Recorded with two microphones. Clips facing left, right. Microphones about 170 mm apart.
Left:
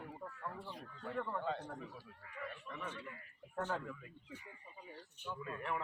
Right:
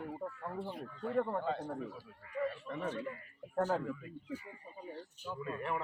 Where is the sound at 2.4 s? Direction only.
40° right (ahead or behind).